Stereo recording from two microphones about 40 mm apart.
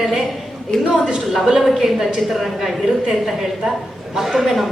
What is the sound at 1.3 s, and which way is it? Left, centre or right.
A woman's voice, centre.